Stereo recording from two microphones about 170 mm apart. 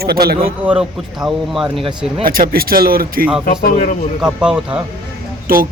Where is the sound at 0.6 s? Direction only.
5° right (ahead or behind).